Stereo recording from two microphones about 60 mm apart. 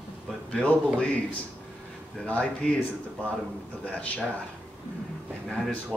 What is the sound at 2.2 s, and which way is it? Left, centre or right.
Speech, centre.